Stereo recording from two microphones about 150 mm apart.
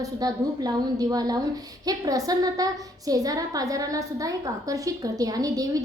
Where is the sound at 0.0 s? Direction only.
25° right (ahead or behind).